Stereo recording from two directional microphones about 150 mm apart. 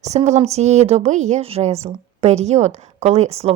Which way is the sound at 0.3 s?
45° right (ahead or behind).